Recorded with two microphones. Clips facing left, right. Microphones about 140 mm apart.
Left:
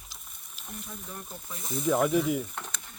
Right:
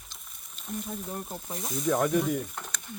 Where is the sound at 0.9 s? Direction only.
40° right (ahead or behind).